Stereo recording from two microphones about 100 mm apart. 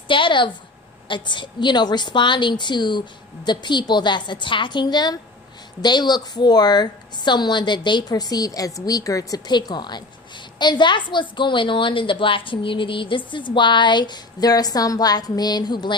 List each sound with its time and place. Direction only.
0.1 s a woman's voice: 55° left (ahead or behind)